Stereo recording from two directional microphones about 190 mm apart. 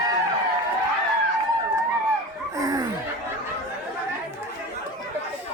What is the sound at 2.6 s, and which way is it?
Laughter, 20° right (ahead or behind).